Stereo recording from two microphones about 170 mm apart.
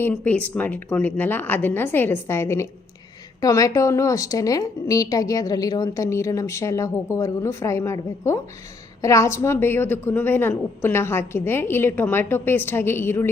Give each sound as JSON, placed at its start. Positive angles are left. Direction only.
{"t": 0.1, "sound": "a woman's voice", "side_deg": 10}